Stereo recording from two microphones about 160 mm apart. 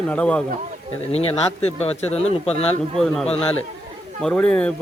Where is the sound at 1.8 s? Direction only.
40° left (ahead or behind).